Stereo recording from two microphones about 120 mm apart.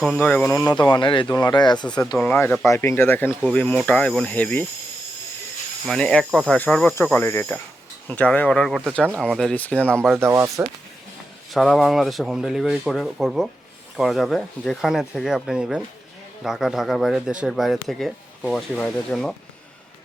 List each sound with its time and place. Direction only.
0.2 s speech: 15° left (ahead or behind)
0.8 s speech: 40° left (ahead or behind)
2.2 s speech: 15° left (ahead or behind)
5.8 s speech: 5° left (ahead or behind)
10.2 s speech: 25° right (ahead or behind)
11.5 s speech: 5° left (ahead or behind)